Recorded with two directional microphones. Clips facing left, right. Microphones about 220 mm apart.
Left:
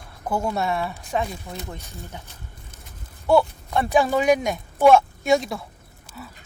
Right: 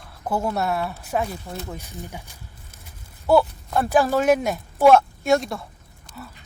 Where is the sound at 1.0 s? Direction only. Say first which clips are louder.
Right 1 dB; 5° right (ahead or behind).